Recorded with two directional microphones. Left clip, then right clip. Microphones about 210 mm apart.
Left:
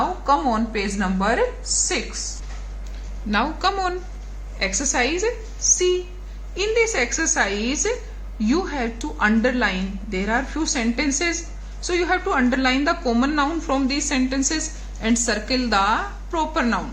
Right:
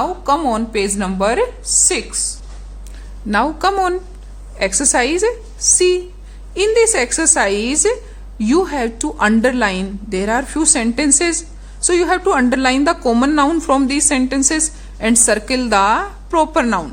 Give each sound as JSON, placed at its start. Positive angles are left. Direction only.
{"t": 0.3, "sound": "a woman's voice", "side_deg": -60}
{"t": 3.2, "sound": "a woman's voice", "side_deg": -50}
{"t": 6.6, "sound": "a woman's voice", "side_deg": -60}